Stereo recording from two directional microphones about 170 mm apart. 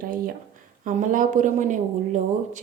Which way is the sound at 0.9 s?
50° right (ahead or behind).